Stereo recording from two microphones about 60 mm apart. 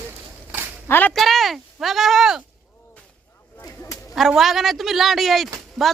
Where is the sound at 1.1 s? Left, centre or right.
Centre.